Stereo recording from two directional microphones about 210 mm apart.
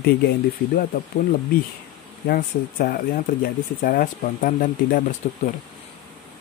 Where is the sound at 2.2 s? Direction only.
45° left (ahead or behind).